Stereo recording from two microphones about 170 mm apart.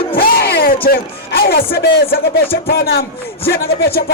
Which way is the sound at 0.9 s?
60° left (ahead or behind).